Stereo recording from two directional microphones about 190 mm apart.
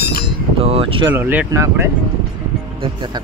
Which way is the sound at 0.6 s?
30° right (ahead or behind).